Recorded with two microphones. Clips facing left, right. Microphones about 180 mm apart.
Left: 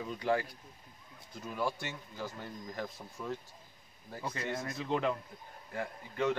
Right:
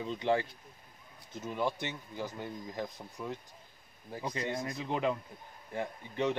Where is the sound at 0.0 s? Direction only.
25° right (ahead or behind).